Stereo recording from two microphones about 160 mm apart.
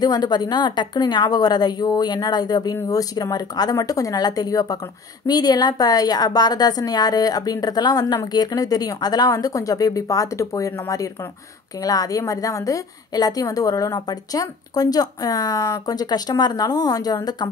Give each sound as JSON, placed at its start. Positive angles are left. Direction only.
{"t": 0.0, "sound": "a woman's voice", "side_deg": 25}